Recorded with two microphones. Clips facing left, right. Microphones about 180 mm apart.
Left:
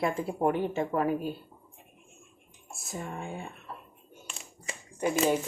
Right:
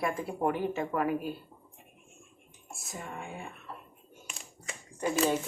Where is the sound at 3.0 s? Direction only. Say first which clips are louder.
Left 2 dB; 30° left (ahead or behind).